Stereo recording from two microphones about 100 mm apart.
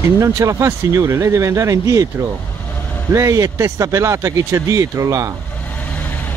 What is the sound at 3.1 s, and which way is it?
Speech, 35° right (ahead or behind).